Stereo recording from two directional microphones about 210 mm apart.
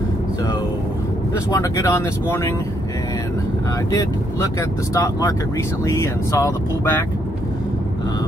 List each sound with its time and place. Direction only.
1.5 s speech: 15° left (ahead or behind)
3.9 s speech: 15° left (ahead or behind)